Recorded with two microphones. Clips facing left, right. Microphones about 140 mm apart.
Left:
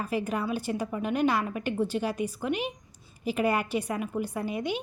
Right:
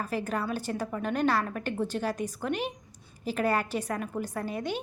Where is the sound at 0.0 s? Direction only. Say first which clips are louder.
Left 1 dB; 10° left (ahead or behind).